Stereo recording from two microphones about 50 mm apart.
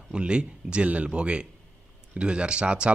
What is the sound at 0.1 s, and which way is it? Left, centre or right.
A man's voice, right.